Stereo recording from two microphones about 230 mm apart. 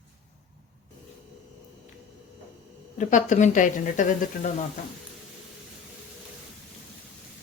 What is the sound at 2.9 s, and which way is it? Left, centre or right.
A woman's voice, left.